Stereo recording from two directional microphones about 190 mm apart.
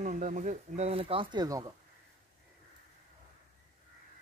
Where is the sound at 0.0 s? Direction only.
40° right (ahead or behind); by 1.7 s 20° right (ahead or behind).